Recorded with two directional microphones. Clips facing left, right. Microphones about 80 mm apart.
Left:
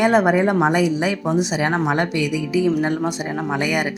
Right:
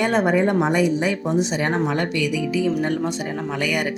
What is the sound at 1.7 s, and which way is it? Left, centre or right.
Speech, left.